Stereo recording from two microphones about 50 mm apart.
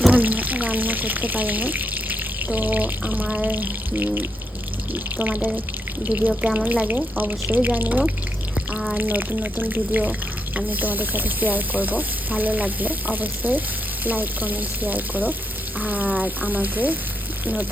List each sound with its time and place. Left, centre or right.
0.1 s speech: right